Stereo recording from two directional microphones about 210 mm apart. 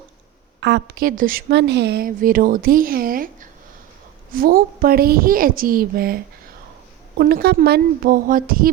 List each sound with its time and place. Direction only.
0.6 s a woman's voice: 50° right (ahead or behind)
4.3 s a woman's voice: 45° right (ahead or behind)
7.2 s a woman's voice: 50° right (ahead or behind)